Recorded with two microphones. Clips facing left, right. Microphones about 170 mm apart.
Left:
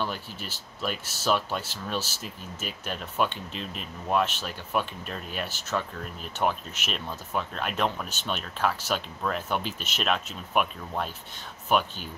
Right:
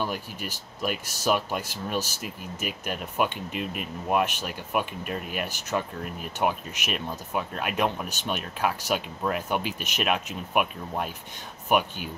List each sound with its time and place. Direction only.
0.0 s speech: 10° right (ahead or behind)
3.5 s speech: 60° right (ahead or behind)
4.1 s speech: 15° right (ahead or behind)